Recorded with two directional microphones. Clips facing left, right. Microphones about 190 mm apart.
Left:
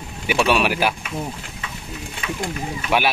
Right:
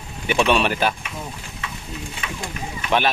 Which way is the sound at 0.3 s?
5° left (ahead or behind).